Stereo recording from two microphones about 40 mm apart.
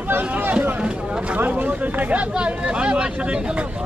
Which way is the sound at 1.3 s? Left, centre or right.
Right.